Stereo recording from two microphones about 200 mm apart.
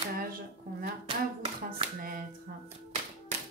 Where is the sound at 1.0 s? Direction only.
25° right (ahead or behind).